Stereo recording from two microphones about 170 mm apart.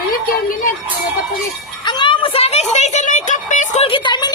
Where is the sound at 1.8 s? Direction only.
25° left (ahead or behind); by 3.8 s 45° left (ahead or behind).